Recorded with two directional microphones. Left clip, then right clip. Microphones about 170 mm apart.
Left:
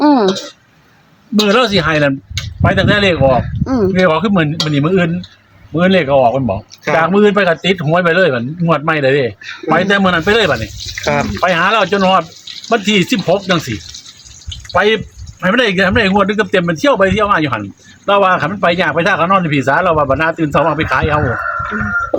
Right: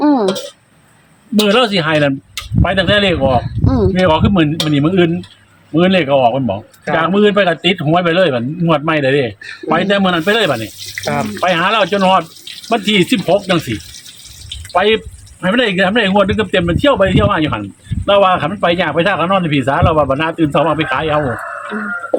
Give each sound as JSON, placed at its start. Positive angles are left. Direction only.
{"t": 0.0, "sound": "a sound", "side_deg": 25}
{"t": 1.4, "sound": "speech", "side_deg": 5}
{"t": 11.0, "sound": "speech", "side_deg": 55}
{"t": 11.3, "sound": "speech", "side_deg": 5}